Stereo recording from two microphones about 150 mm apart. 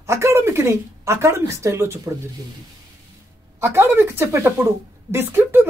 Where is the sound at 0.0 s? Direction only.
15° right (ahead or behind).